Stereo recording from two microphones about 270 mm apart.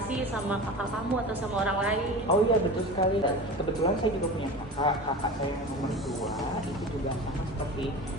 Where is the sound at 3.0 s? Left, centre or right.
Centre.